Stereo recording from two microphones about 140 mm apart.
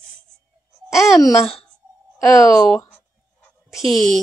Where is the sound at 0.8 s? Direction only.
5° right (ahead or behind).